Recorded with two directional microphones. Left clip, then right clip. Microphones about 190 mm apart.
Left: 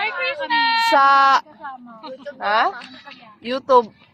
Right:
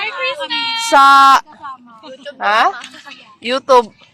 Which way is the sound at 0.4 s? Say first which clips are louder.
Left 2 dB; centre (ahead or behind).